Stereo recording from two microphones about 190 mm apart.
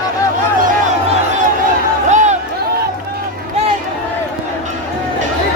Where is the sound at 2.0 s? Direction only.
40° right (ahead or behind).